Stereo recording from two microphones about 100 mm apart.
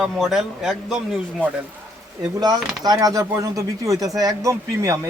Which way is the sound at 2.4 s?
40° right (ahead or behind).